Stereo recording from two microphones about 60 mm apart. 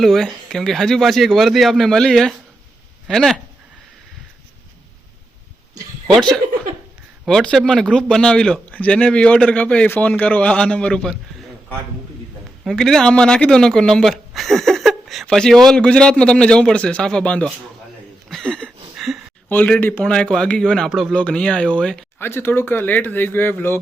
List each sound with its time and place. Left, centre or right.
0.0 s a man's voice: centre
6.1 s a man's voice: centre
9.8 s speech: left
10.1 s a man's voice: left
12.7 s a man's voice: centre
14.1 s a sound: centre
15.4 s a man's voice: centre
18.9 s a sound: centre
19.5 s a man's voice: left
20.1 s a man's voice: centre
22.2 s speech: left